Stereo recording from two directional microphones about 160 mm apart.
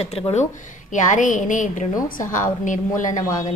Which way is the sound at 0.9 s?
50° left (ahead or behind).